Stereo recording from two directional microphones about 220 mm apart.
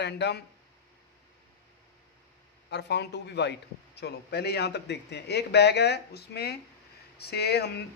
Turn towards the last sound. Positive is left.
turn(degrees=50)  # may be behind; listen again after turning